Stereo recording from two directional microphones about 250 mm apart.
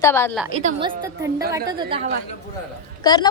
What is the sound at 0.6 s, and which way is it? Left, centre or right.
A woman's voice, centre.